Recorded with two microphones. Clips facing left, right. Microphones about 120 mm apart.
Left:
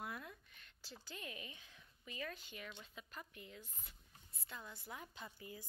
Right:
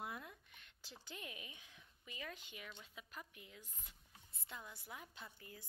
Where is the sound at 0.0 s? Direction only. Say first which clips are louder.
Even; 20° right (ahead or behind).